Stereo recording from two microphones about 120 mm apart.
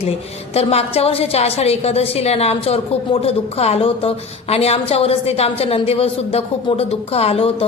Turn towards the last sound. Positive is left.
turn(degrees=55)  # may be behind; listen again after turning